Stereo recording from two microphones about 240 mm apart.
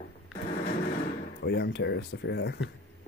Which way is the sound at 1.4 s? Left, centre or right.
Left.